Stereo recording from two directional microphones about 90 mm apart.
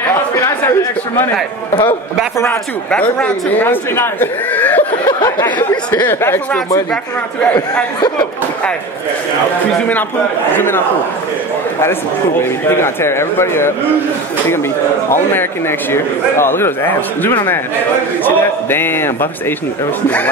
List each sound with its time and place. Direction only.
2.9 s speech: 15° left (ahead or behind)
5.0 s speech: 55° left (ahead or behind)
6.0 s speech: 25° left (ahead or behind)
12.4 s speech: 30° left (ahead or behind)
15.9 s speech: 25° left (ahead or behind)